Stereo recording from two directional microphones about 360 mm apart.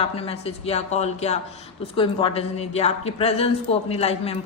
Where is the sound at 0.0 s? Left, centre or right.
Centre.